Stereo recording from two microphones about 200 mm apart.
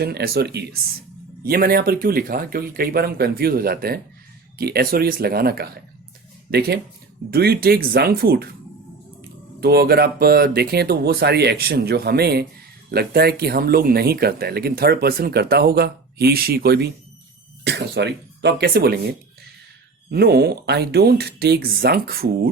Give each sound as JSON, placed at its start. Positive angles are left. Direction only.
{"t": 0.0, "sound": "speech", "side_deg": -55}
{"t": 9.6, "sound": "speech", "side_deg": -50}
{"t": 20.1, "sound": "speech", "side_deg": -50}